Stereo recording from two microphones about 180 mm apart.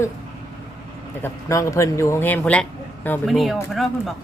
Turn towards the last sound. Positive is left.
turn(degrees=0)  # may be behind; listen again after turning